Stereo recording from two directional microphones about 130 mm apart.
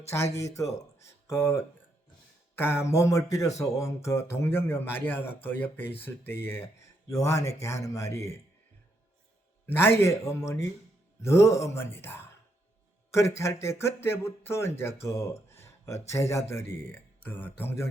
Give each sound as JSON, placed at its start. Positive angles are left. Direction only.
{"t": 0.1, "sound": "speech", "side_deg": 20}
{"t": 2.6, "sound": "speech", "side_deg": 15}
{"t": 9.6, "sound": "speech", "side_deg": 15}
{"t": 15.0, "sound": "a sound", "side_deg": 20}
{"t": 16.0, "sound": "speech", "side_deg": 25}